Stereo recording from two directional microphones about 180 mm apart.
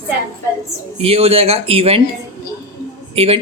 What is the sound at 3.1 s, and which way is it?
Speech, 30° right (ahead or behind).